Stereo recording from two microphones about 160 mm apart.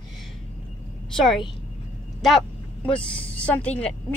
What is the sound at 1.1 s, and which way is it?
Speech, centre (ahead or behind).